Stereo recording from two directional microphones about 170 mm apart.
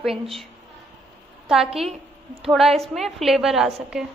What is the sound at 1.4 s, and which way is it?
A woman's voice, centre (ahead or behind).